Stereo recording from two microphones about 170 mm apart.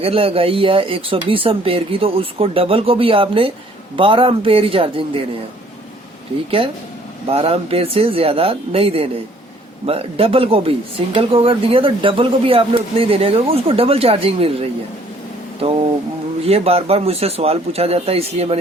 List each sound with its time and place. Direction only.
0.0 s speech: 35° right (ahead or behind)
7.3 s speech: 35° right (ahead or behind)
16.5 s speech: 35° right (ahead or behind)